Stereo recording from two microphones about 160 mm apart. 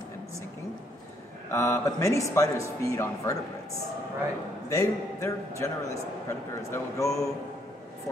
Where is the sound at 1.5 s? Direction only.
15° left (ahead or behind).